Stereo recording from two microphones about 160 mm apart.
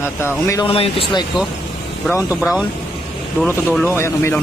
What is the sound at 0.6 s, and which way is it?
Speech, 35° left (ahead or behind).